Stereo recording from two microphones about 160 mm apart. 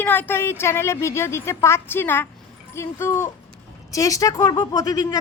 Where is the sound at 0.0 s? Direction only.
10° left (ahead or behind).